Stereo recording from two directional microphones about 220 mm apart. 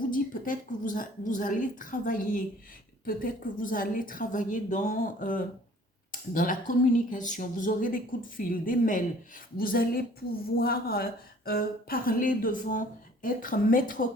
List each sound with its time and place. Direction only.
0.1 s speech: 35° left (ahead or behind)